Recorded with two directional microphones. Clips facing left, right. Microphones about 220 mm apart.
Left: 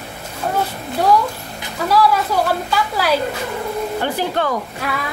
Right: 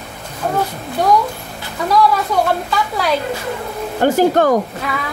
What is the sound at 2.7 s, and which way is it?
Speech, 5° left (ahead or behind).